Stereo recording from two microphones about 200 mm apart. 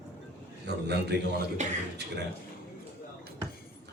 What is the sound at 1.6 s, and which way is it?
Speech, 35° right (ahead or behind).